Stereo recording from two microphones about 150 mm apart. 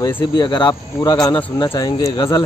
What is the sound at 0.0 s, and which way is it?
Speech, 25° left (ahead or behind).